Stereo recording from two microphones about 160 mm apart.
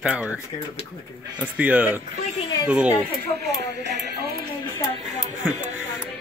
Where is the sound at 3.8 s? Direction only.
90° right.